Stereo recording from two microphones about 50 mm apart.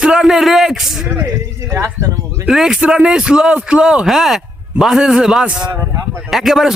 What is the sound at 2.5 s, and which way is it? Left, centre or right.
A man's voice, centre.